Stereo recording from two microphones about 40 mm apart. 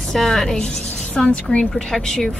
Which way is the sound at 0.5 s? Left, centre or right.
Left.